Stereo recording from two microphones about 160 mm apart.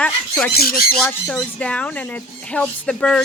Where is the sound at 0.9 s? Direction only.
5° left (ahead or behind).